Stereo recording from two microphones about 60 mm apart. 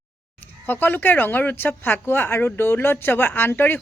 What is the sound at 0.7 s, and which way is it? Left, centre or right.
Speech, left.